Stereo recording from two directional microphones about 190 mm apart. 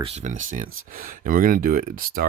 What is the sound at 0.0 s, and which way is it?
Speech, 35° right (ahead or behind).